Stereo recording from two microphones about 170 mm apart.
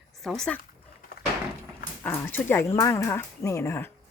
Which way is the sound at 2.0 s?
10° left (ahead or behind).